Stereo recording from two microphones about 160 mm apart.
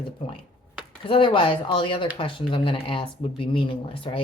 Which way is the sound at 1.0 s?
35° left (ahead or behind).